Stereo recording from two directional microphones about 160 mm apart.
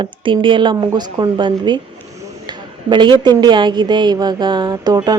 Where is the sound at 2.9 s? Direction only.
30° right (ahead or behind).